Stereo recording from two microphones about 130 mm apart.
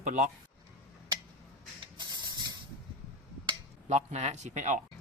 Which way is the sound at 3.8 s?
60° right (ahead or behind).